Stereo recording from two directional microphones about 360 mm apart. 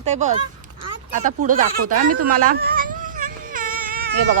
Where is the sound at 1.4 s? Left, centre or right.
Right.